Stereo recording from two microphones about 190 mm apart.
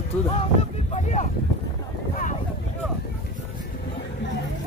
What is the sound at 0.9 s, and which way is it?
Speech, 40° left (ahead or behind).